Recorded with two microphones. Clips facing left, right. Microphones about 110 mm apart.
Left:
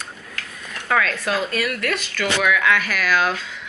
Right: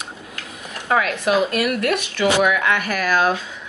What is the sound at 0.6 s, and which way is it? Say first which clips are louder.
Speech: right 2 dB; 20° right (ahead or behind).